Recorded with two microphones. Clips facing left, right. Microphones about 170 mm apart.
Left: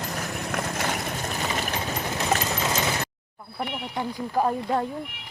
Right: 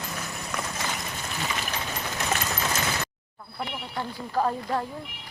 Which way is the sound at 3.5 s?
15° left (ahead or behind).